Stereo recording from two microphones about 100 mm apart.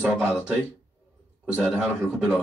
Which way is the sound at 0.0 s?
15° right (ahead or behind).